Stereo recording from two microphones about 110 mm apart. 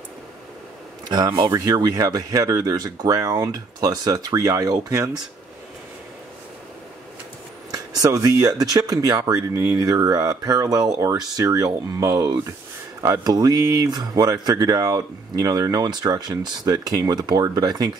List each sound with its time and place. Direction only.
1.0 s speech: 35° right (ahead or behind)
7.7 s speech: 35° right (ahead or behind)